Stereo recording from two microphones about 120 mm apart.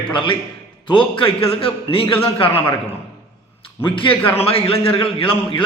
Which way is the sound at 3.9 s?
45° left (ahead or behind).